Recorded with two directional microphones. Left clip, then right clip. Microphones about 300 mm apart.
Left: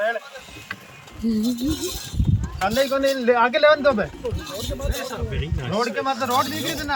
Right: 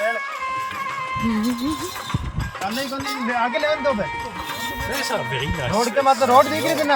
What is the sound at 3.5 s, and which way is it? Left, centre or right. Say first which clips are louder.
Speech: left 4 dB; centre.